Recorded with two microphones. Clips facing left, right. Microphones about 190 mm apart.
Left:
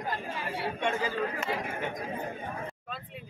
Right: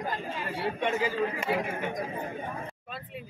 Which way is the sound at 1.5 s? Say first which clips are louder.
Right 5 dB; 10° right (ahead or behind).